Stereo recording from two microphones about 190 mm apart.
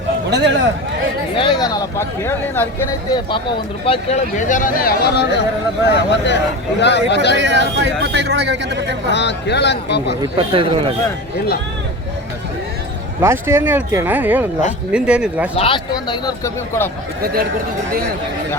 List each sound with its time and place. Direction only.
0.3 s a man's voice: 60° right (ahead or behind)
1.4 s speech: 20° left (ahead or behind)
3.8 s speech: 40° left (ahead or behind); by 7.3 s 65° left (ahead or behind)
7.3 s speech: 70° right (ahead or behind)
9.1 s speech: 65° left (ahead or behind)
10.3 s speech: 30° right (ahead or behind)
13.2 s speech: 10° right (ahead or behind)
15.5 s speech: 30° left (ahead or behind)